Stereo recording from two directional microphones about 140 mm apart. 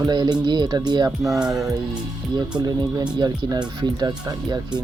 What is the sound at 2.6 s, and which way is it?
Speech, 30° right (ahead or behind).